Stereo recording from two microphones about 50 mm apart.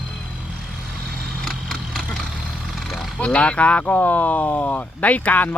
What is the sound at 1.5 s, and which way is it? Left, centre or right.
Vehicle, centre.